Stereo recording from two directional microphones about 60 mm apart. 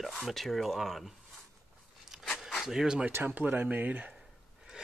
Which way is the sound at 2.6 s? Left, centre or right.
Centre.